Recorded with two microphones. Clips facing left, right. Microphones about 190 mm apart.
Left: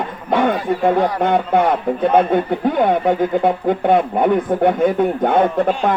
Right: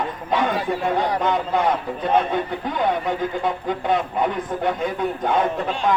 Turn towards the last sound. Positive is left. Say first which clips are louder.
# left 6 dB
turn(degrees=55)  # may be behind; listen again after turning